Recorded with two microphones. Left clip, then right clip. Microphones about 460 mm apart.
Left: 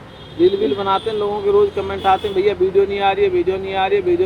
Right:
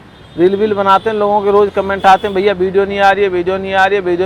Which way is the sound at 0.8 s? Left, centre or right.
Right.